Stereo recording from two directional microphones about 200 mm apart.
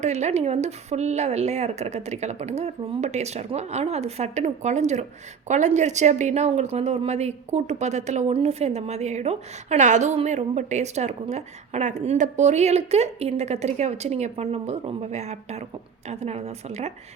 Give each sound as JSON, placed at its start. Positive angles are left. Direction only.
{"t": 0.0, "sound": "a woman's voice", "side_deg": -35}